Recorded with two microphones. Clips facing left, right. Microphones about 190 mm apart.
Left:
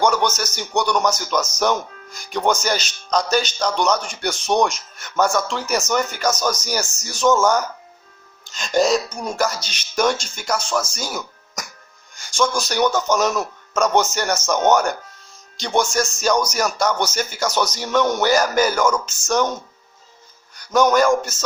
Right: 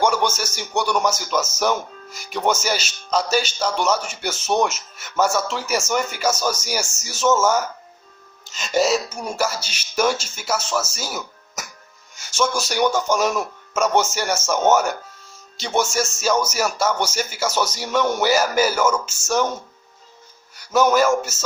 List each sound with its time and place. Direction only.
0.0 s a man's voice: 10° right (ahead or behind)
20.7 s speech: 5° right (ahead or behind)